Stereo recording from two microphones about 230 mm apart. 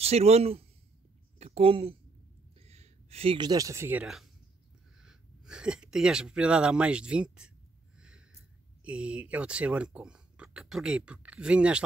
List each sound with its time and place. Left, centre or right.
0.0 s a woman's voice: right; by 7.5 s centre
8.8 s speech: centre